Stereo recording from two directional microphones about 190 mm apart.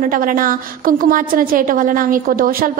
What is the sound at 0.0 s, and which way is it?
A woman's voice, 45° right (ahead or behind).